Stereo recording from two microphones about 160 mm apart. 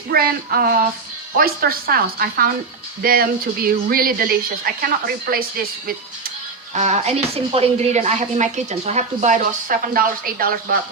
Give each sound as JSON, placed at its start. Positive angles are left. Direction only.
{"t": 0.1, "sound": "speech", "side_deg": -70}
{"t": 6.7, "sound": "speech", "side_deg": -45}